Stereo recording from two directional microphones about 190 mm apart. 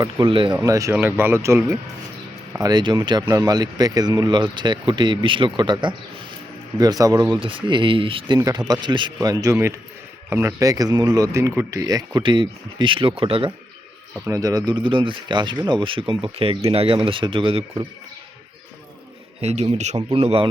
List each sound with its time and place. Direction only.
0.0 s speech: 25° right (ahead or behind)
14.3 s speech: 20° right (ahead or behind)
19.4 s speech: 35° right (ahead or behind)